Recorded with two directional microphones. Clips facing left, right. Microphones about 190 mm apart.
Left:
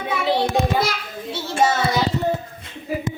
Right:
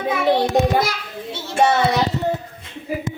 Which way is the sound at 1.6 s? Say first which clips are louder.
Right 3 dB; 65° right (ahead or behind).